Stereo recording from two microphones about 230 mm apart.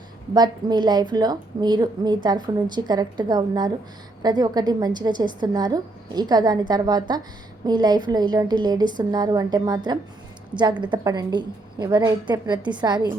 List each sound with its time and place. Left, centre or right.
0.3 s a woman's voice: centre